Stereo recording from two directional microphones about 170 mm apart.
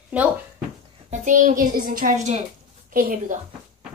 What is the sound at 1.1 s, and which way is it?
A child's voice, 50° right (ahead or behind).